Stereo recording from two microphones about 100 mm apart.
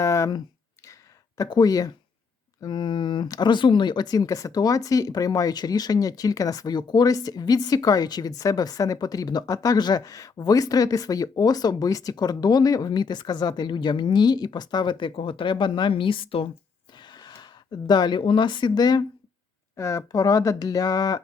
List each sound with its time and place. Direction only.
0.0 s a sound: 30° left (ahead or behind)
1.4 s speech: 40° left (ahead or behind)
2.6 s speech: 50° left (ahead or behind); by 16.5 s 65° left (ahead or behind)
17.0 s speech: 45° left (ahead or behind)
19.7 s speech: 30° left (ahead or behind)